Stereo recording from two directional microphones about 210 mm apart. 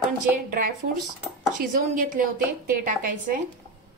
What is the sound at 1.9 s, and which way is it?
A woman's voice, 40° right (ahead or behind).